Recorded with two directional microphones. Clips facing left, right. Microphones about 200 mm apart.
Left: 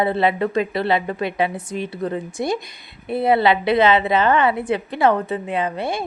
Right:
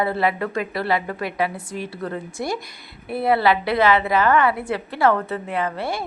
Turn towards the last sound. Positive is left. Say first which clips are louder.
# left 2 dB
turn(degrees=20)  # may be behind; listen again after turning